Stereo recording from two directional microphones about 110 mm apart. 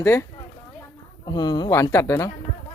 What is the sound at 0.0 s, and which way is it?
Speech, 25° left (ahead or behind).